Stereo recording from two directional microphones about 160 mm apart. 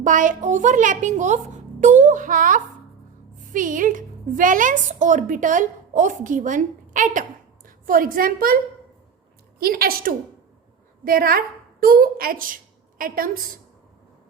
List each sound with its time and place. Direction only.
0.0 s a child's voice: 55° right (ahead or behind)
9.6 s a woman's voice: 70° right (ahead or behind)